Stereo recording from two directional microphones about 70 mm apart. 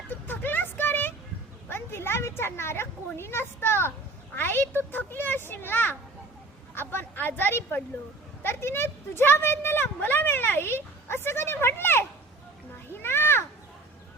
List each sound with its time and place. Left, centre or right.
0.1 s a sound: left
1.7 s a child's voice: left
13.0 s children playing: left